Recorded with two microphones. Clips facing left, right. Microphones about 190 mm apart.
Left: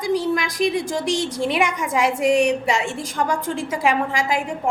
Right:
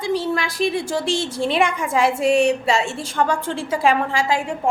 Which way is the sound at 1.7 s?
30° right (ahead or behind).